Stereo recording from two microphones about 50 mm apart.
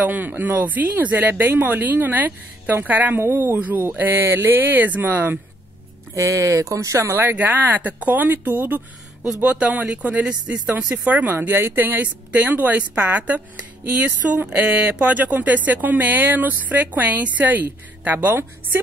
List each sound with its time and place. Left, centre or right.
0.0 s speech: right
3.3 s speech: right
3.5 s speech: right
4.0 s speech: right
6.1 s speech: right
7.2 s speech: right
9.4 s speech: right
11.3 s speech: right